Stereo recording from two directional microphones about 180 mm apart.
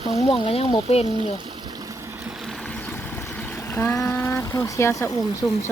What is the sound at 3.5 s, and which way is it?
Speech, 15° left (ahead or behind).